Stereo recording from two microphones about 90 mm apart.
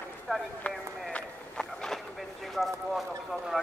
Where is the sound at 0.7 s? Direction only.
20° left (ahead or behind).